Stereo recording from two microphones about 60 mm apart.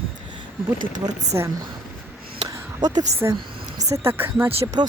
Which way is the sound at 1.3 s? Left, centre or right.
Right.